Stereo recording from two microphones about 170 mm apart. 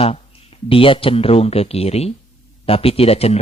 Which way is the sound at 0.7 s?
30° left (ahead or behind).